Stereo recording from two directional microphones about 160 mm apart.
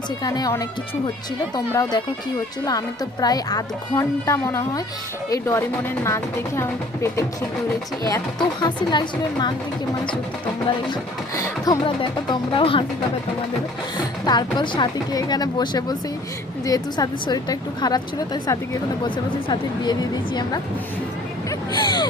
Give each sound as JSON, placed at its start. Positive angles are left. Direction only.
{"t": 0.2, "sound": "speech", "side_deg": 25}
{"t": 11.3, "sound": "speech", "side_deg": 20}
{"t": 11.9, "sound": "speech", "side_deg": 35}
{"t": 13.9, "sound": "speech", "side_deg": 25}
{"t": 21.7, "sound": "speech", "side_deg": 25}